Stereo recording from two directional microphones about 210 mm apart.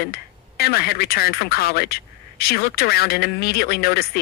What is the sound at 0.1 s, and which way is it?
A man's voice, 50° left (ahead or behind).